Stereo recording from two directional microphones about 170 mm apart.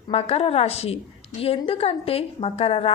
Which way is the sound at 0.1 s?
35° left (ahead or behind).